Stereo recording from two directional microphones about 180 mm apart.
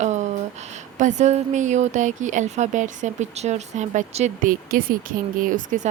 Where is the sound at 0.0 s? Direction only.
40° right (ahead or behind).